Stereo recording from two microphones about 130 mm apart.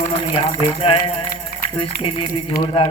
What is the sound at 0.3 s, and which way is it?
A man's voice, 50° left (ahead or behind).